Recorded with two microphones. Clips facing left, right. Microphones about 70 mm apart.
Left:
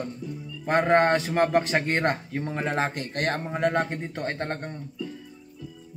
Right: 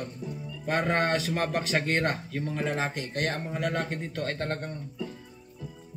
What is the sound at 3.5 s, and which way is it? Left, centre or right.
A man's voice, left.